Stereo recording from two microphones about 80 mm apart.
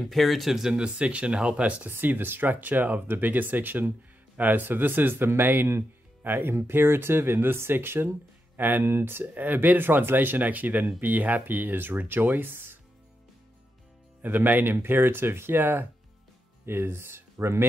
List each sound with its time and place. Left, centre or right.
0.0 s speech: centre; by 12.7 s right
14.2 s speech: right